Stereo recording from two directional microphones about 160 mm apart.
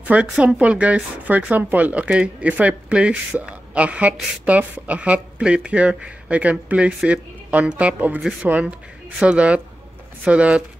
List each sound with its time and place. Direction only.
0.0 s speech: 10° right (ahead or behind)